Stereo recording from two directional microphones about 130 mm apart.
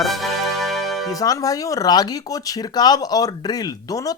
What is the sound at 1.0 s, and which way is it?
Speech, 25° left (ahead or behind).